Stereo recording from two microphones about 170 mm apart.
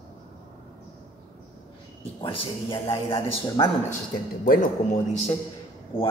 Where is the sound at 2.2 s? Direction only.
30° left (ahead or behind).